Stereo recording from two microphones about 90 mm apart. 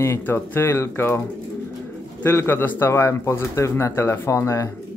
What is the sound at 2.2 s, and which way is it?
Speech, 25° left (ahead or behind).